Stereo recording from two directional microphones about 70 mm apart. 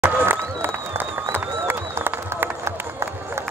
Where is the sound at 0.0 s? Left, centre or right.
Right.